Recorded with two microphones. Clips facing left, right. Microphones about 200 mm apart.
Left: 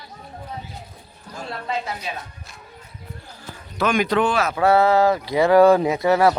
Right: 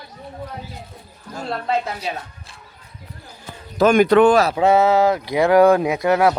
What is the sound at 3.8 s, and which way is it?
Speech, 45° right (ahead or behind).